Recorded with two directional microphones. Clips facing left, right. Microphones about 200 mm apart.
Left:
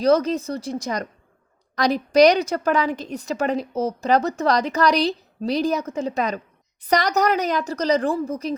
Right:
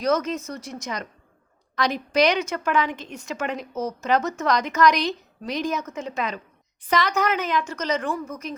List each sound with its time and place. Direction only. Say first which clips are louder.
0.0 s a woman's voice: left 5 dB; 35° left (ahead or behind)